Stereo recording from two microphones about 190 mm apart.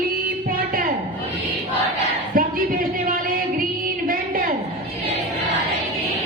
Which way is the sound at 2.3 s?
50° right (ahead or behind).